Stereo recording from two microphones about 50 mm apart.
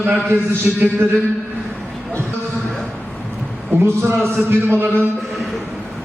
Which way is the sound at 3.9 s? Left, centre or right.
Right.